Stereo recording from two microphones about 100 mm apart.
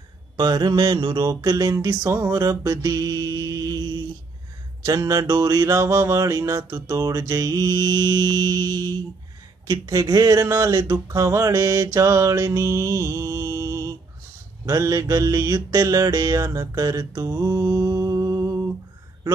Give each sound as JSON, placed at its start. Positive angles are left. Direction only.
{"t": 0.4, "sound": "speech", "side_deg": -45}
{"t": 17.6, "sound": "music", "side_deg": -30}